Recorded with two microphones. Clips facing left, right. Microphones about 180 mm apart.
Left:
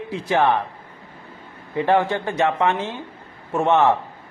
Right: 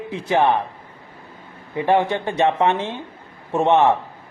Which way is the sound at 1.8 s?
15° right (ahead or behind).